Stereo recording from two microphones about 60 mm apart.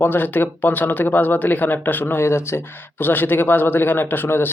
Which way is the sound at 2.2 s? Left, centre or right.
Left.